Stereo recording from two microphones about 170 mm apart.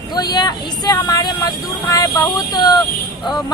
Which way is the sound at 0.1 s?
25° left (ahead or behind).